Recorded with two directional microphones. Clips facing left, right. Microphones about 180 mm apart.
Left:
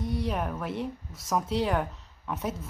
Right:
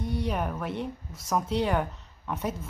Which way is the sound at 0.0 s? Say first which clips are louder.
Even; centre (ahead or behind).